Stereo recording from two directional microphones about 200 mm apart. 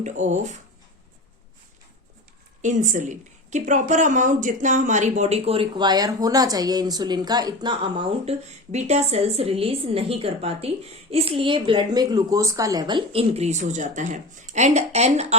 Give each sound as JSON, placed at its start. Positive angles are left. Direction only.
{"t": 0.0, "sound": "speech", "side_deg": -35}
{"t": 2.6, "sound": "speech", "side_deg": -40}